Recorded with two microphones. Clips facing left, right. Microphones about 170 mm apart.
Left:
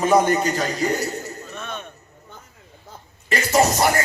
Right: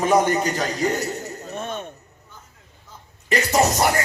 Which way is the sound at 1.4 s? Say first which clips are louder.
Right 3 dB; 45° right (ahead or behind).